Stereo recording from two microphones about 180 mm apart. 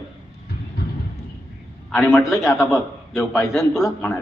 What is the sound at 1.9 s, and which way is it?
A man's voice, centre (ahead or behind).